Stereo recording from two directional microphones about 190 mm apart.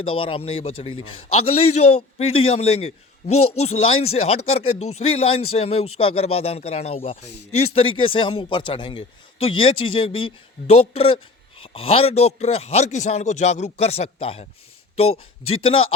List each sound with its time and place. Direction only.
0.0 s a man's voice: 30° left (ahead or behind)
0.9 s a man's voice: 90° left
1.3 s a man's voice: 35° left (ahead or behind)